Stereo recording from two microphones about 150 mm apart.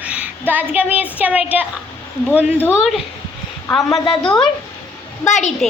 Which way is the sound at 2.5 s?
15° left (ahead or behind).